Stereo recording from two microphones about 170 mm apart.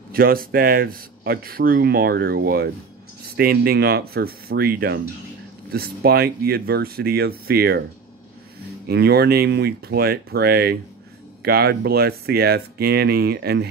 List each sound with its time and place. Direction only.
0.1 s speech: 60° right (ahead or behind)
8.8 s speech: 70° right (ahead or behind)